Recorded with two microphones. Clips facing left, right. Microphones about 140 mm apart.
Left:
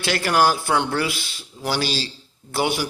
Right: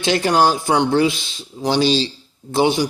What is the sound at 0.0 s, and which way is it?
A man's voice, 20° right (ahead or behind).